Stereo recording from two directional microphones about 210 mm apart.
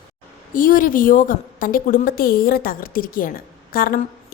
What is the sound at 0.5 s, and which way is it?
A woman's voice, 40° left (ahead or behind).